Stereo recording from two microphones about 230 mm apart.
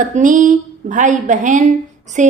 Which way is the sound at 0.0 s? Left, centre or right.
Right.